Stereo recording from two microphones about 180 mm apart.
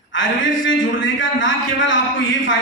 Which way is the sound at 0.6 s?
90° left.